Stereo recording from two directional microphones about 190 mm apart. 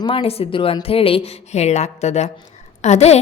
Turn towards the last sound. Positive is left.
turn(degrees=35)  # may be behind; listen again after turning